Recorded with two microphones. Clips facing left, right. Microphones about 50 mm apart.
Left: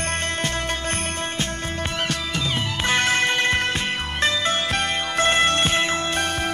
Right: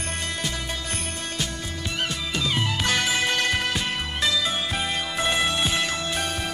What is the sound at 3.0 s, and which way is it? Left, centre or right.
Music, left.